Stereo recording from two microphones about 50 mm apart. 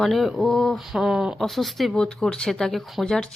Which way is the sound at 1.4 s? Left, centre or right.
Centre.